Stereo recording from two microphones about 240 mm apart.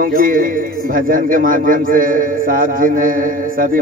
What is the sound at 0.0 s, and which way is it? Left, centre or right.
A man's voice, right.